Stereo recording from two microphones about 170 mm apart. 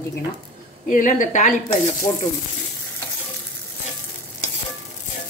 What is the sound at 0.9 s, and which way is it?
Speech, 50° left (ahead or behind).